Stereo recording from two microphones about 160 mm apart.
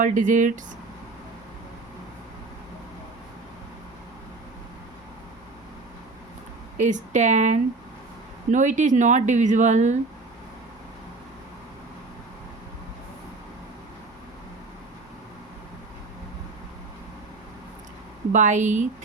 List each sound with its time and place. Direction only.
0.0 s speech: 55° right (ahead or behind)
6.7 s speech: 50° right (ahead or behind)
18.3 s speech: 50° right (ahead or behind)